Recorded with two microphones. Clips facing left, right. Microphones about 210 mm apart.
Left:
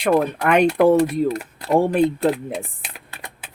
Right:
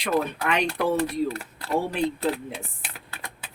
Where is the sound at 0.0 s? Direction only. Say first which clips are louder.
Left 7 dB; 50° left (ahead or behind).